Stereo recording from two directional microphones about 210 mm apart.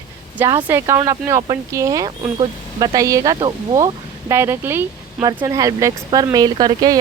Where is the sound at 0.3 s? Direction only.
10° right (ahead or behind).